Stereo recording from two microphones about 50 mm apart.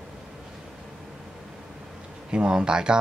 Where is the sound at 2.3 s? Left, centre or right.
Centre.